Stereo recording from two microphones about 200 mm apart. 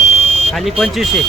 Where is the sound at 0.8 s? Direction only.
Centre (ahead or behind).